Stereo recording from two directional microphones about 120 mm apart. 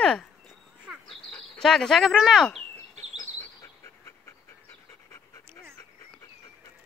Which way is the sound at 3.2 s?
20° left (ahead or behind).